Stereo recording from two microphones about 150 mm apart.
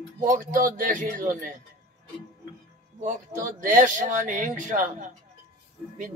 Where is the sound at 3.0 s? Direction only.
60° right (ahead or behind).